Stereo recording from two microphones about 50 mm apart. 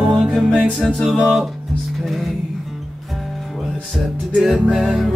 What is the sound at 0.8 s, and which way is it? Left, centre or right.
Music, centre.